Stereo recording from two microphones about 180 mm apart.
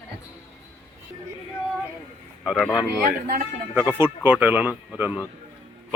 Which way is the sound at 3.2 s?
50° right (ahead or behind).